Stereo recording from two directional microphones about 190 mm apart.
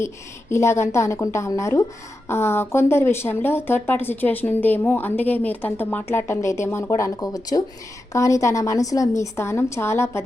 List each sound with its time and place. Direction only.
0.5 s speech: 15° left (ahead or behind)